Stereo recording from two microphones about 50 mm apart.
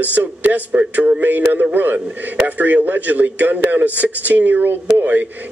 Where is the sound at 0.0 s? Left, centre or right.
Right.